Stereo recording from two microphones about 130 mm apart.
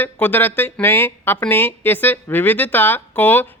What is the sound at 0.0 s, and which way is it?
A woman's voice, 15° left (ahead or behind).